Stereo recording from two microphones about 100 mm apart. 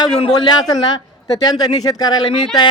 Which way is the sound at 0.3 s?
45° left (ahead or behind).